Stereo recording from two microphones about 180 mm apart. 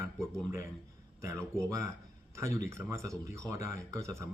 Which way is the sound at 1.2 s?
15° right (ahead or behind).